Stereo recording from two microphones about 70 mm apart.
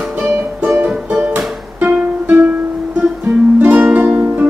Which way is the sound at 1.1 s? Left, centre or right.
Right.